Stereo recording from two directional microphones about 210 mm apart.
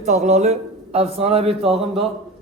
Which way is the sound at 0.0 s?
35° right (ahead or behind).